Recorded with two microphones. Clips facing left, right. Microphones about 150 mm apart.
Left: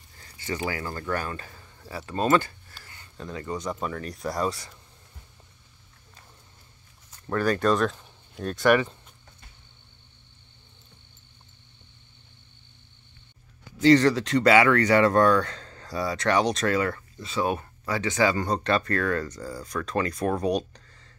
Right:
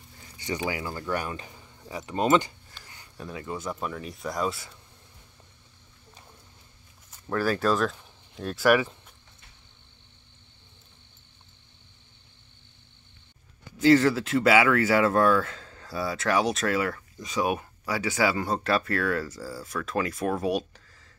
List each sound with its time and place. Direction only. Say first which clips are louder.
0.2 s speech: even; 15° right (ahead or behind)
7.2 s speech: left 2 dB; centre (ahead or behind)
13.7 s speech: left 1 dB; 5° right (ahead or behind)